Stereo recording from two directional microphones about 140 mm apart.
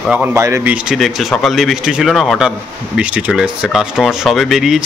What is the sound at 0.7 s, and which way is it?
Speech, centre (ahead or behind).